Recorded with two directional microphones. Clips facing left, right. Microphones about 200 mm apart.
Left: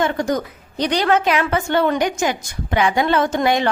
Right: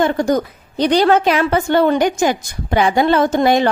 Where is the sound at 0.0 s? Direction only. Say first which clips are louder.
Right 4 dB; 35° right (ahead or behind).